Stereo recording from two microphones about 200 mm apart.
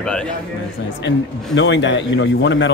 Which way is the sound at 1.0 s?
65° left (ahead or behind).